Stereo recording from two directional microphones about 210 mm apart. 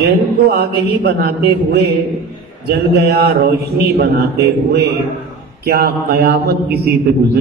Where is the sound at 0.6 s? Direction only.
50° right (ahead or behind).